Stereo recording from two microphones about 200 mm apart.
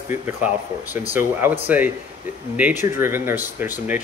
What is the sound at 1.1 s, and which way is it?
Speech, 10° right (ahead or behind).